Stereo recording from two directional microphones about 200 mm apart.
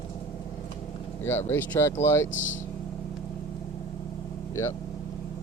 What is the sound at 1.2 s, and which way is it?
Speech, 10° left (ahead or behind).